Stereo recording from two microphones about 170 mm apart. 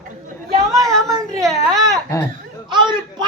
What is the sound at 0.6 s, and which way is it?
Speech, 20° right (ahead or behind).